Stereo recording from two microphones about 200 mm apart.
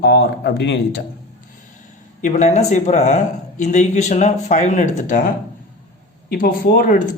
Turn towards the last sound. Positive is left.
turn(degrees=50)  # may be behind; listen again after turning